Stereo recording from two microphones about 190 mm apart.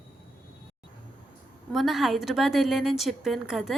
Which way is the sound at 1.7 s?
Centre (ahead or behind).